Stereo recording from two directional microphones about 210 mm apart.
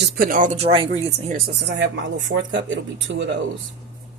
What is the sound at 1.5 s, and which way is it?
Speech, 55° right (ahead or behind).